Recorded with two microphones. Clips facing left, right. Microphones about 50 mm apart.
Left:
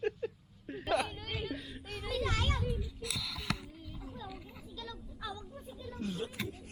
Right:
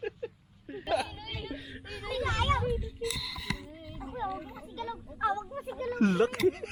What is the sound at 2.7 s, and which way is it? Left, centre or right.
Speech, centre.